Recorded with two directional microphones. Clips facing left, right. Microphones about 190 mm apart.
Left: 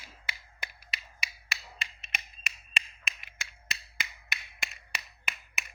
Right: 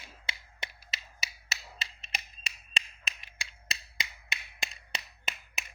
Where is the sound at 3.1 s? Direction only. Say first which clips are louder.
Even; 35° right (ahead or behind).